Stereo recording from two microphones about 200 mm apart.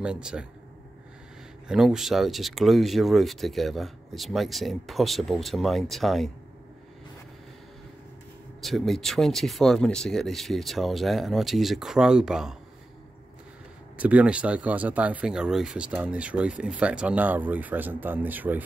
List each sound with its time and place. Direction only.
0.0 s speech: 5° right (ahead or behind)
1.7 s speech: centre (ahead or behind)
8.6 s speech: centre (ahead or behind)
13.9 s speech: 5° right (ahead or behind)